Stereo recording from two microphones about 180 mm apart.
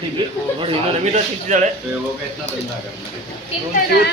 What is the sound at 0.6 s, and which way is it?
A man's voice, 40° right (ahead or behind).